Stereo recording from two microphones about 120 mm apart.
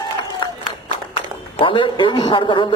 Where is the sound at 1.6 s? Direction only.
45° left (ahead or behind).